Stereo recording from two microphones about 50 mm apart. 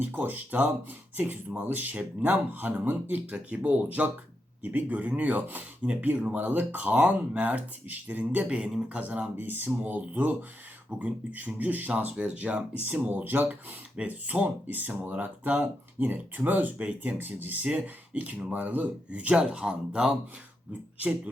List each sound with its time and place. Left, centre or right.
0.0 s speech: right
3.2 s speech: right
8.4 s speech: centre
9.4 s speech: right
12.8 s speech: right
19.5 s speech: centre